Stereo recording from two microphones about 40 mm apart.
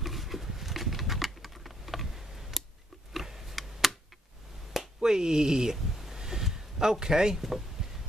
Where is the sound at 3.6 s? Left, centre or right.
Centre.